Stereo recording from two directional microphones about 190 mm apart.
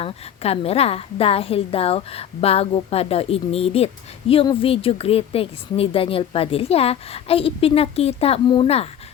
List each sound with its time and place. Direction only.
0.0 s a woman's voice: 30° left (ahead or behind)